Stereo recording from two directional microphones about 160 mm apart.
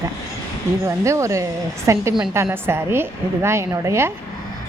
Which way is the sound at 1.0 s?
20° right (ahead or behind).